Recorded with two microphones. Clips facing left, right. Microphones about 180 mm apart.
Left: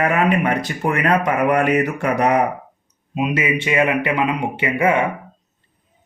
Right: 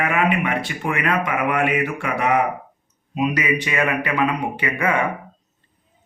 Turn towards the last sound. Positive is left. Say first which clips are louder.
# left 4 dB
turn(degrees=25)  # may be behind; listen again after turning